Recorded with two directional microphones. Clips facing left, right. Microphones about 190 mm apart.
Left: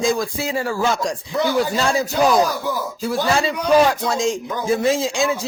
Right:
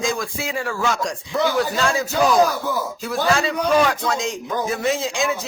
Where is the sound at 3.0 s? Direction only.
30° left (ahead or behind).